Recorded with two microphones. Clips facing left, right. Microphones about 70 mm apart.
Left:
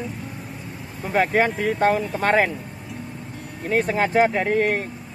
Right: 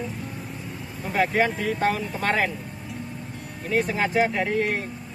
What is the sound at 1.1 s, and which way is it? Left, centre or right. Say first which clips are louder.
Speech: left 3 dB; left.